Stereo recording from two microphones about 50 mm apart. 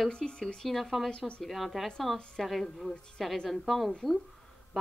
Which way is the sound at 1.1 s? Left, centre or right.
Centre.